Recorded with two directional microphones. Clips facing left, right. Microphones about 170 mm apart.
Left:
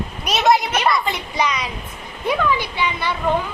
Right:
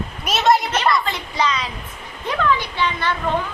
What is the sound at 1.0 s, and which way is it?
A woman's voice, 15° left (ahead or behind).